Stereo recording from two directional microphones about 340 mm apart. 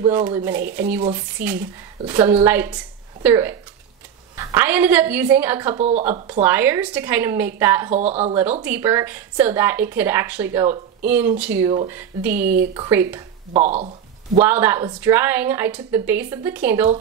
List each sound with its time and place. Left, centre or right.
0.0 s a woman's voice: centre
5.8 s speech: centre
6.0 s a woman's voice: centre
7.9 s speech: centre
8.6 s a woman's voice: centre
13.5 s speech: centre
14.4 s a woman's voice: centre